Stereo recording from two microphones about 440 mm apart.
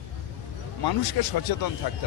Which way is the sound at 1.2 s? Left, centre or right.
Left.